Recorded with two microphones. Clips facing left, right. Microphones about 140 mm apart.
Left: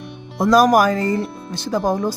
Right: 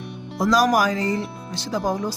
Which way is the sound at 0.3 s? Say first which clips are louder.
Left 5 dB; 50° left (ahead or behind).